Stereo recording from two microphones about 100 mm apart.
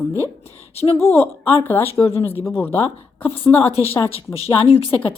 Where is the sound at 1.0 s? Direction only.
20° left (ahead or behind).